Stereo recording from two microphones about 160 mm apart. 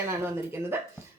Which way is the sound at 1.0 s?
15° right (ahead or behind).